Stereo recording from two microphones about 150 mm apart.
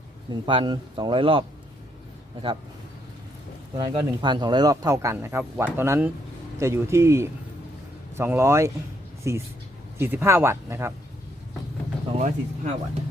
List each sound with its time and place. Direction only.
0.3 s speech: 30° right (ahead or behind)
3.8 s speech: 30° right (ahead or behind)
12.1 s speech: 50° right (ahead or behind)